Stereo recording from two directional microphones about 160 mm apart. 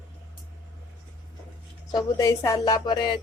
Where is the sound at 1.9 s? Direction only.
25° left (ahead or behind).